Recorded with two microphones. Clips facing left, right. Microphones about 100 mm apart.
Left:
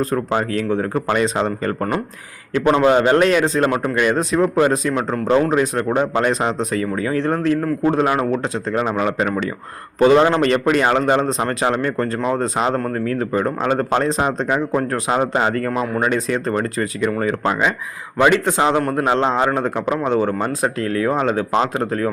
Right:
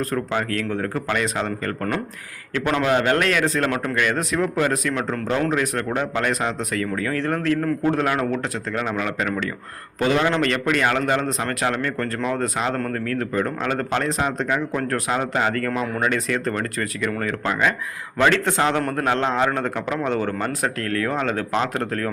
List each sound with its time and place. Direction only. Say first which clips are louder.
0.0 s a man's voice: left 4 dB; 25° left (ahead or behind)
8.7 s a man's voice: left 6 dB; 30° left (ahead or behind)